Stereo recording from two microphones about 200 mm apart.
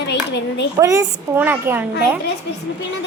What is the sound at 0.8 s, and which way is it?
A woman's voice, 15° right (ahead or behind).